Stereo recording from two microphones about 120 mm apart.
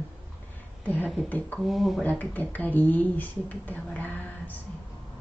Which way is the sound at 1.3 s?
15° left (ahead or behind).